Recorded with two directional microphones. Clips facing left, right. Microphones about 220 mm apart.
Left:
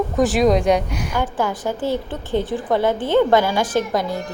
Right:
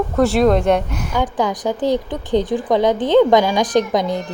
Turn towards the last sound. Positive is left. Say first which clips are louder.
# right 4 dB
turn(degrees=-20)  # may be behind; listen again after turning